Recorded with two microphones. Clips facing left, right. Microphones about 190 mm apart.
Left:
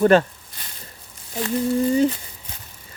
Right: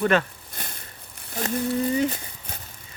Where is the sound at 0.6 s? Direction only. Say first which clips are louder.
Right 6 dB; 50° right (ahead or behind).